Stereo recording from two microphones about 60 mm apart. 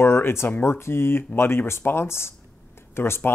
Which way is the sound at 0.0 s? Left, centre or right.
Left.